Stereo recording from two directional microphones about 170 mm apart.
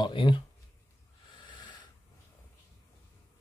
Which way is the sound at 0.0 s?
30° left (ahead or behind).